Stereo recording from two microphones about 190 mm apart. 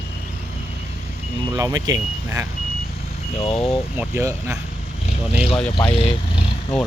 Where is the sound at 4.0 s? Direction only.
15° right (ahead or behind).